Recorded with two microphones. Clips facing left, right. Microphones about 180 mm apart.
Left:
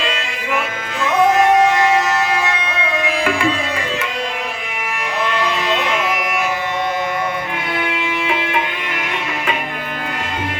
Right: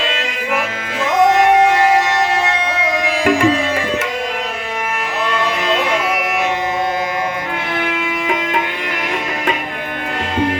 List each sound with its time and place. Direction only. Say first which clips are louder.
2.4 s music: right 3 dB; 30° right (ahead or behind)